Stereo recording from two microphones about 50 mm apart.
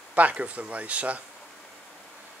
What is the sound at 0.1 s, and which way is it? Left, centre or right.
Speech, right.